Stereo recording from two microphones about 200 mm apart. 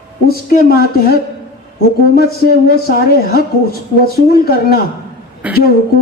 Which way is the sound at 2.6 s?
50° left (ahead or behind).